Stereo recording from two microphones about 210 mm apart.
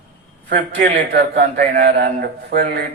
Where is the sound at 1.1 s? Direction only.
50° right (ahead or behind).